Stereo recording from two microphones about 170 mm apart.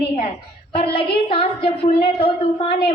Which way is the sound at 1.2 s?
30° left (ahead or behind).